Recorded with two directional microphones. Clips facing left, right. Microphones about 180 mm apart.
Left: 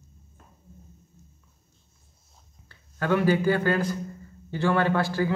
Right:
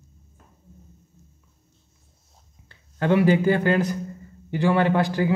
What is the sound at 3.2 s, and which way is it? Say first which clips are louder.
A man's voice: right 3 dB; 20° right (ahead or behind).